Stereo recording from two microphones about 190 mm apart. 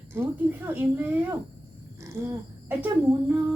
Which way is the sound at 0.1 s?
10° right (ahead or behind).